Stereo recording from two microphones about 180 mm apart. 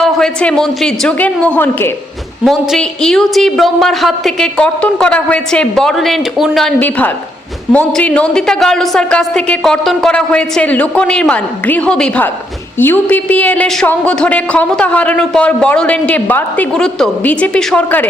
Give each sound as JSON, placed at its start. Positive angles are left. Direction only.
{"t": 0.0, "sound": "a woman's voice", "side_deg": 5}